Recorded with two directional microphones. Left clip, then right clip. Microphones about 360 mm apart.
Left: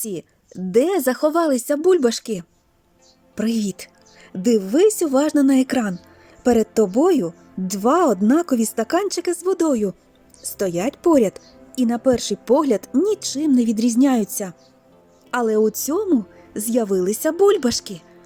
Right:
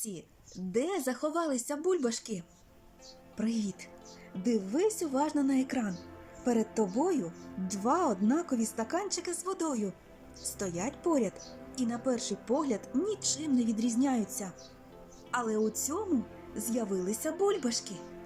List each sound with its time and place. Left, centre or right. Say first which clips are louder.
0.0 s speech: left 14 dB; left